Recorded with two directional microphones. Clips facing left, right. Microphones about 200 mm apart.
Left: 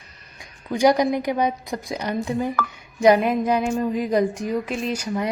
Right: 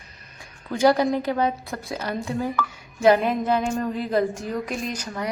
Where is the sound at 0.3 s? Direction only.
15° left (ahead or behind).